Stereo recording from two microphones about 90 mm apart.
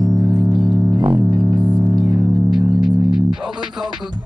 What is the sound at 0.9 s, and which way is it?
Music, 55° right (ahead or behind).